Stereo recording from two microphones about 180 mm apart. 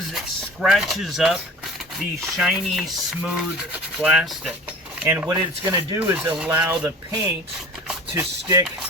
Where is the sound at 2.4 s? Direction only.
Centre (ahead or behind).